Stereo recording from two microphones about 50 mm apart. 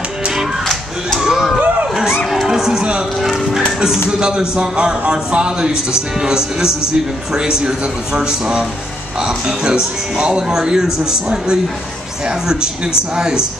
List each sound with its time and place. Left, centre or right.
1.2 s a sound: centre
2.0 s music: centre
3.2 s music: centre
4.2 s a man's voice: centre